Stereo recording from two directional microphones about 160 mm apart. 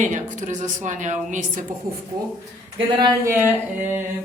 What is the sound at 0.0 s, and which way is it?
Speech, 50° right (ahead or behind).